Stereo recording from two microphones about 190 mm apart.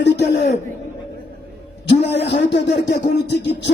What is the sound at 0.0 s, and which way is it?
Speech, 60° left (ahead or behind).